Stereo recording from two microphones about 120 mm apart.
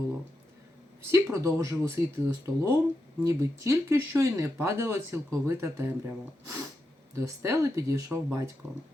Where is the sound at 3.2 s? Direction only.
30° right (ahead or behind).